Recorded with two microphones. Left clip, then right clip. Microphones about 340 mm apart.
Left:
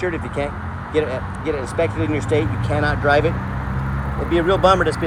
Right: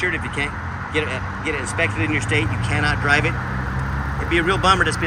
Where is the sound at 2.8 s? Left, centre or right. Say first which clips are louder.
Left 2 dB; left.